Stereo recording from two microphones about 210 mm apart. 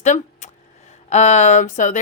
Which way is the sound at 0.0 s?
35° left (ahead or behind).